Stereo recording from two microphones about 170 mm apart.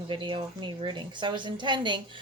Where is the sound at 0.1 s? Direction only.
30° right (ahead or behind).